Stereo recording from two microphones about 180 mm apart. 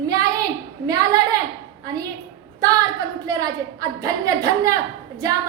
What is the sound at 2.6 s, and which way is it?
A woman's voice, 20° right (ahead or behind).